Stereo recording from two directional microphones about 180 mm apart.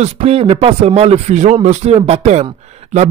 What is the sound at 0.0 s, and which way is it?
Speech, 35° right (ahead or behind).